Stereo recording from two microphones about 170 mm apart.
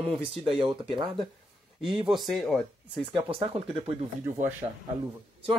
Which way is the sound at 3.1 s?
35° right (ahead or behind).